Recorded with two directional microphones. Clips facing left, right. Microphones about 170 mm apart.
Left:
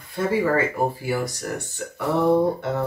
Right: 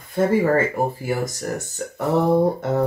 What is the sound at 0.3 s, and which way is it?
Speech, 45° right (ahead or behind).